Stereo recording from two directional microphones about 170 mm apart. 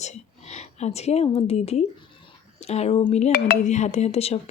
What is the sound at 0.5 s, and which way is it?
Speech, 40° left (ahead or behind).